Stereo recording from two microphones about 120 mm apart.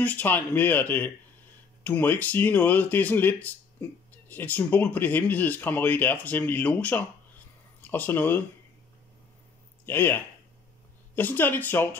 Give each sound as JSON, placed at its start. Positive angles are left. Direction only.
{"t": 0.0, "sound": "speech", "side_deg": 15}
{"t": 9.8, "sound": "speech", "side_deg": 15}